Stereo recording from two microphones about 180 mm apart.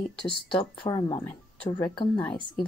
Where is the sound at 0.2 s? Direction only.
25° left (ahead or behind).